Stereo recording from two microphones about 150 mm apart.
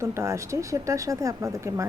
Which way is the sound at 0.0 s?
20° right (ahead or behind).